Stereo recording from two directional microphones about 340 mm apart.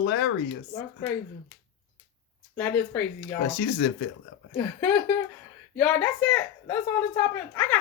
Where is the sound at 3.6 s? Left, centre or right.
Left.